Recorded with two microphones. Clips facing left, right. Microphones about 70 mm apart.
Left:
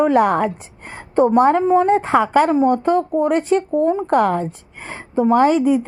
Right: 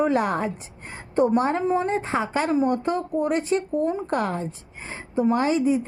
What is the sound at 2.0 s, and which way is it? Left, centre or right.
A woman's voice, left.